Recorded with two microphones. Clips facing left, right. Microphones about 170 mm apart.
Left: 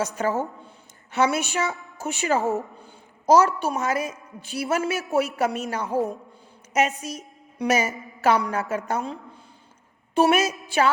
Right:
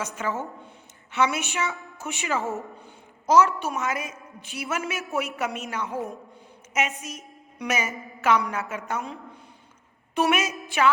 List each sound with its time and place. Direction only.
0.0 s a woman's voice: 40° left (ahead or behind)